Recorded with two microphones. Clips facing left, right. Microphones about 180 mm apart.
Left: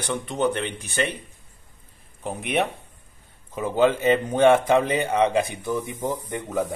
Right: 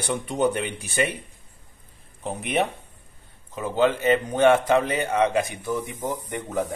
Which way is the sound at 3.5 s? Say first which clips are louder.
Left 2 dB; 15° left (ahead or behind).